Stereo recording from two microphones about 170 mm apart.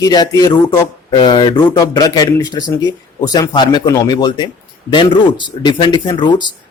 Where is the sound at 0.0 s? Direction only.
25° left (ahead or behind).